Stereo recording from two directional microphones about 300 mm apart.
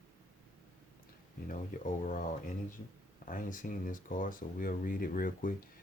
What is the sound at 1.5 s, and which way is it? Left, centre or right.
Speech, left.